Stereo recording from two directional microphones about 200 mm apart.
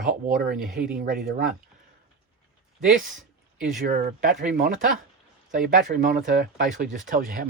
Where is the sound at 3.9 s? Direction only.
45° right (ahead or behind).